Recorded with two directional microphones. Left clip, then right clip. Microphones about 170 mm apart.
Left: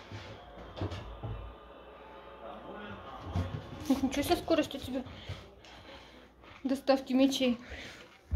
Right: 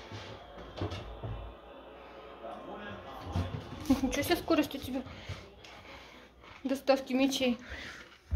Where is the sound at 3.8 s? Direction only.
10° left (ahead or behind).